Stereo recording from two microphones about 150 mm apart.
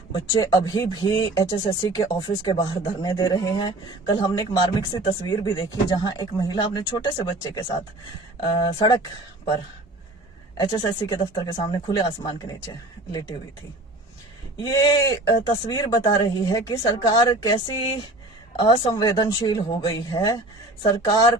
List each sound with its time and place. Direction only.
0.1 s speech: 30° left (ahead or behind)
10.6 s speech: 35° left (ahead or behind)
14.6 s speech: 25° left (ahead or behind)